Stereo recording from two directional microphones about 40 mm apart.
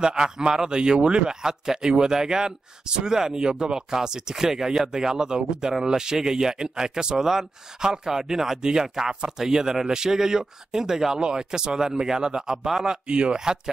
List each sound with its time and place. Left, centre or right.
0.0 s a man's voice: centre